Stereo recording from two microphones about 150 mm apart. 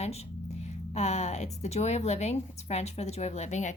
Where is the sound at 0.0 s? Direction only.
45° left (ahead or behind).